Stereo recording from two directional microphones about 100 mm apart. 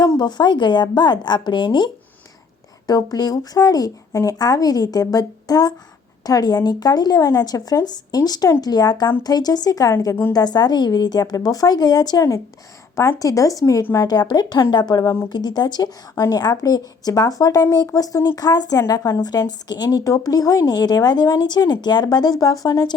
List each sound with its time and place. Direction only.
0.2 s speech: 45° left (ahead or behind)